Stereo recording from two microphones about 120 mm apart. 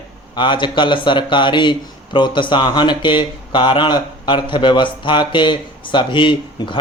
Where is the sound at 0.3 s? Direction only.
40° left (ahead or behind).